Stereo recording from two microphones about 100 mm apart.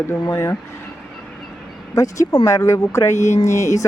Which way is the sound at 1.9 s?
35° left (ahead or behind).